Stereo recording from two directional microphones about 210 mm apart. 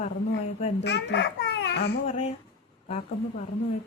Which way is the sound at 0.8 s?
55° left (ahead or behind).